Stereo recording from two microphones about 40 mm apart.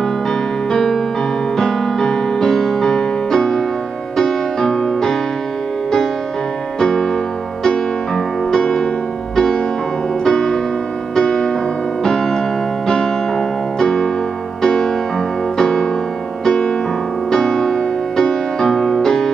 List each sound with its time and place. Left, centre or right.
0.3 s music: centre
6.8 s music: centre
8.5 s music: centre